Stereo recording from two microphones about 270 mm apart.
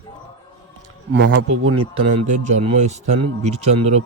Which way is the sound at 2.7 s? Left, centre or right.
Right.